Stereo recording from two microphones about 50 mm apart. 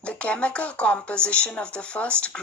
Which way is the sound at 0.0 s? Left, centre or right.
Left.